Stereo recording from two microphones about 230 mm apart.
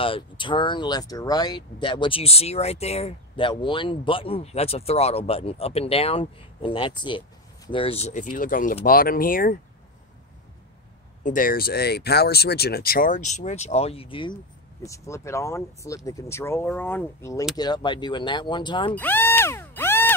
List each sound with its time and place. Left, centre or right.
0.0 s speech: left
11.2 s speech: left; by 18.9 s centre
18.9 s a sound: centre